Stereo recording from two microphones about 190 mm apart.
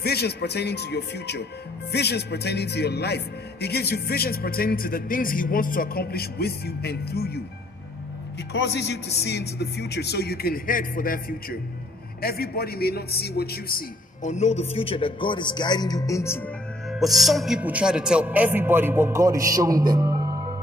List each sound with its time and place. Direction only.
0.0 s a man's voice: 55° left (ahead or behind)
8.5 s a man's voice: 65° left (ahead or behind); by 16.4 s 15° left (ahead or behind)
16.9 s a man's voice: centre (ahead or behind); by 20.5 s 20° right (ahead or behind)